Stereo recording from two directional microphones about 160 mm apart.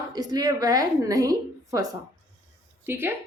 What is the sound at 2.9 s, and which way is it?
Speech, 15° right (ahead or behind).